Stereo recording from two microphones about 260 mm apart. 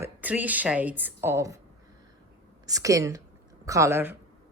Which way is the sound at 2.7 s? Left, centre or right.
Centre.